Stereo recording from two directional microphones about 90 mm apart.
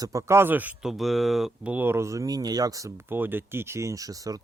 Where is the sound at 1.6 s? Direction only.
20° right (ahead or behind); by 4.4 s 40° right (ahead or behind).